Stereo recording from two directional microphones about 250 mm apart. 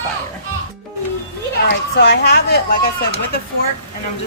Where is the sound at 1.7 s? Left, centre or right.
Left.